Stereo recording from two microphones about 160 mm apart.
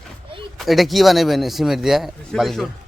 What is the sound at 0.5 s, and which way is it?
A man's voice, centre (ahead or behind).